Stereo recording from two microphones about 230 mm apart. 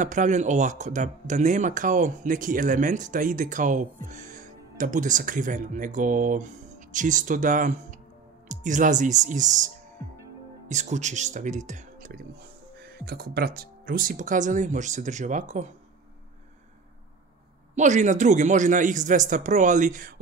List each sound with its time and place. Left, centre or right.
0.0 s speech: right
10.7 s speech: right
17.7 s speech: right